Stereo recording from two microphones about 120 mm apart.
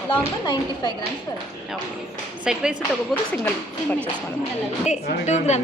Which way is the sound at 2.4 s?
5° right (ahead or behind).